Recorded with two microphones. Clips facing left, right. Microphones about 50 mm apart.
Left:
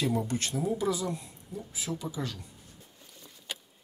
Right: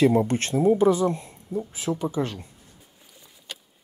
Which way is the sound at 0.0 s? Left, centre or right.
Right.